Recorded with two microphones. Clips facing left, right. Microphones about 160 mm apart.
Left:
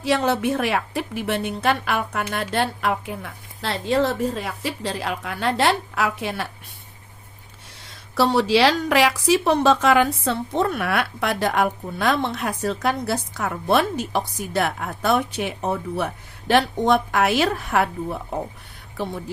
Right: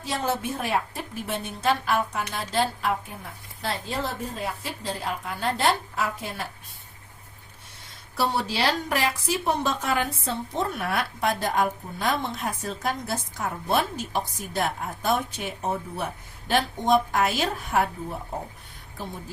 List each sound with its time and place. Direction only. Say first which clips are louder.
0.0 s a woman's voice: left 7 dB; 75° left (ahead or behind)
8.1 s a woman's voice: left 8 dB; 90° left; by 18.3 s 75° left (ahead or behind)